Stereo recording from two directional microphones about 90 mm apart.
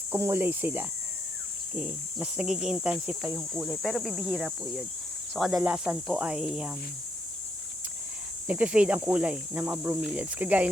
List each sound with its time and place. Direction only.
0.1 s speech: 25° right (ahead or behind); by 3.2 s 10° right (ahead or behind)
3.3 s speech: centre (ahead or behind)
8.4 s speech: 15° right (ahead or behind)
10.0 s speech: 10° right (ahead or behind)